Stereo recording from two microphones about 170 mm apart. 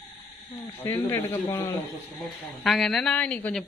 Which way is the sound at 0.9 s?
15° left (ahead or behind).